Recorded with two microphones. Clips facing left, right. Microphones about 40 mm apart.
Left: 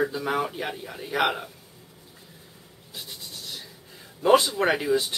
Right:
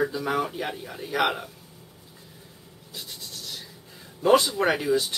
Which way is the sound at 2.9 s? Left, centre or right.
Centre.